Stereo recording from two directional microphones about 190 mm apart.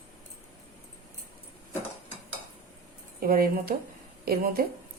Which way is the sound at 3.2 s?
50° right (ahead or behind).